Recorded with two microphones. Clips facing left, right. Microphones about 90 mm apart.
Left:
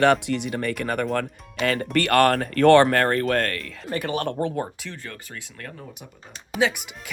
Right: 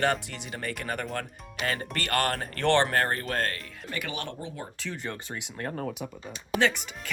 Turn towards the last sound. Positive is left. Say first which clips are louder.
# left 3 dB
turn(degrees=10)  # may be behind; listen again after turning